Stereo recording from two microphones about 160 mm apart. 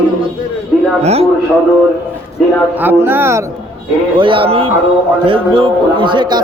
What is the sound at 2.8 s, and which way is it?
Speech, 15° right (ahead or behind).